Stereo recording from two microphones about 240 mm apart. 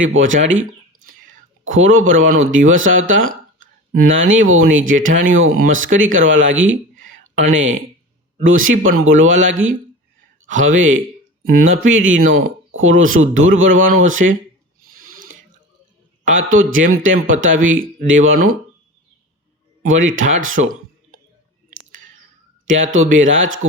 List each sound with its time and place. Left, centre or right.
0.0 s speech: right
14.8 s a sound: right
16.3 s speech: right
19.9 s speech: right
22.6 s speech: right